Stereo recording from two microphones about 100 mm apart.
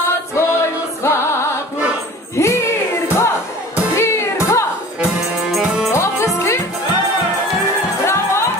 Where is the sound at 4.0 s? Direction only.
30° left (ahead or behind).